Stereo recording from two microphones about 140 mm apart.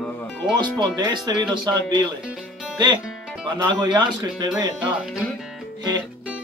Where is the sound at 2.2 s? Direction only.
5° right (ahead or behind).